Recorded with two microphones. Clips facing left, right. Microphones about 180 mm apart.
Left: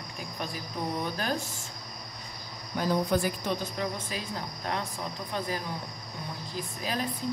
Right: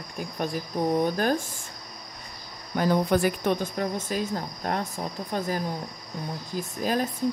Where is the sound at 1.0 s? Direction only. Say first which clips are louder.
Right 7 dB; 45° right (ahead or behind).